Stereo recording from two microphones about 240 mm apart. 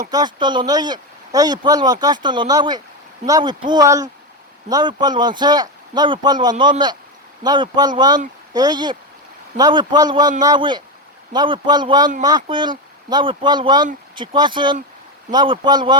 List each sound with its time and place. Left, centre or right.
0.1 s speech: centre